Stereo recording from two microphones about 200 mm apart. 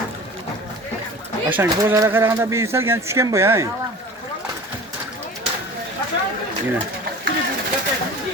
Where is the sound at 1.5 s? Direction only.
10° right (ahead or behind).